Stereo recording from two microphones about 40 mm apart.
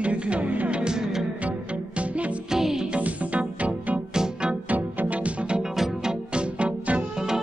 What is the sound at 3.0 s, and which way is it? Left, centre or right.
Music, right.